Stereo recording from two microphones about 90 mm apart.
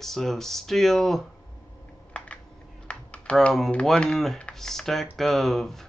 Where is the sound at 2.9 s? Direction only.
15° left (ahead or behind).